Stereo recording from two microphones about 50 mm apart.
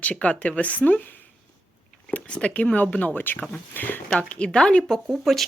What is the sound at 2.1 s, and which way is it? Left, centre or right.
Speech, left.